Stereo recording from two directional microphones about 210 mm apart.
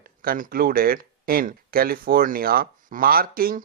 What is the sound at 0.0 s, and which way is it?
Speech, 45° right (ahead or behind).